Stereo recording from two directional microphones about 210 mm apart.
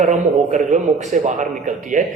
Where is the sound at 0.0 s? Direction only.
35° right (ahead or behind).